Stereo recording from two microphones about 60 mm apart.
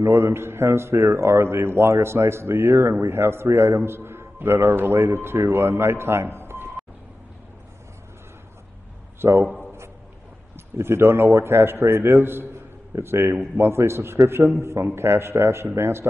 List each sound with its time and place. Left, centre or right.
0.0 s a man's voice: right
9.2 s a man's voice: right
10.8 s a man's voice: right